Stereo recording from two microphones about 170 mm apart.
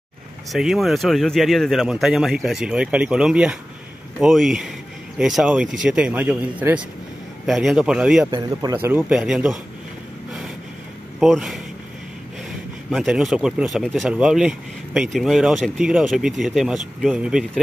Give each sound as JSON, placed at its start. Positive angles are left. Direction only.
{"t": 0.5, "sound": "speech", "side_deg": 0}
{"t": 11.1, "sound": "speech", "side_deg": 0}
{"t": 12.9, "sound": "speech", "side_deg": -5}